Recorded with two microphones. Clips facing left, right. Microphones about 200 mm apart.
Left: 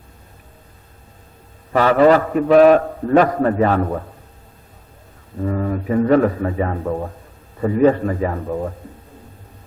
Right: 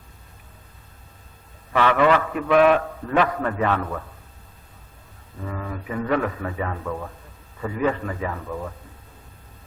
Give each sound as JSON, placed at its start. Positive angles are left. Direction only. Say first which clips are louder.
{"t": 1.7, "sound": "a man's voice", "louder": "left 6 dB", "side_deg": 40}
{"t": 5.4, "sound": "a man's voice", "louder": "left 10 dB", "side_deg": 40}